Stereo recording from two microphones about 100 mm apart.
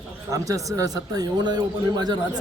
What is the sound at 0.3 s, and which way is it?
A man's voice, 35° right (ahead or behind).